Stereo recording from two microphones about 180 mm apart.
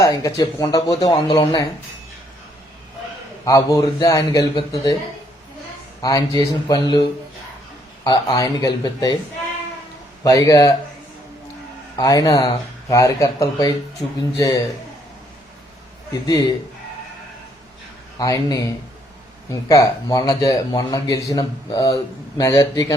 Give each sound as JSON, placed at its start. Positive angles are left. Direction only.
{"t": 0.0, "sound": "speech", "side_deg": 15}
{"t": 3.4, "sound": "speech", "side_deg": 20}
{"t": 6.0, "sound": "speech", "side_deg": 20}
{"t": 8.0, "sound": "speech", "side_deg": 20}
{"t": 10.2, "sound": "speech", "side_deg": 20}
{"t": 11.9, "sound": "speech", "side_deg": 20}
{"t": 18.2, "sound": "speech", "side_deg": 20}